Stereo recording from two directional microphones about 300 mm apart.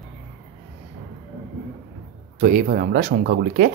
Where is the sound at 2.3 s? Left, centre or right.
Right.